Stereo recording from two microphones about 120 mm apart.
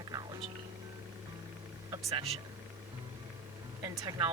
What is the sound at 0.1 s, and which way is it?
Music, 35° right (ahead or behind).